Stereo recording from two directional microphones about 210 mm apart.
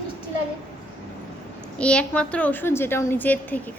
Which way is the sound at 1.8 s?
5° left (ahead or behind).